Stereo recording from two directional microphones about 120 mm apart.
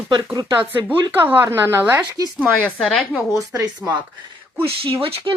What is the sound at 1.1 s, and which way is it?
Speech, 15° right (ahead or behind).